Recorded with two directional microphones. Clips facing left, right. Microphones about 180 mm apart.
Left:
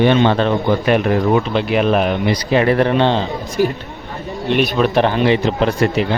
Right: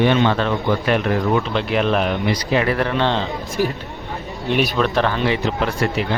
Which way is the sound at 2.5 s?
25° left (ahead or behind).